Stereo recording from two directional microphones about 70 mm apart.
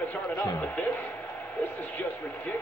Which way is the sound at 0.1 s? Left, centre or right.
Left.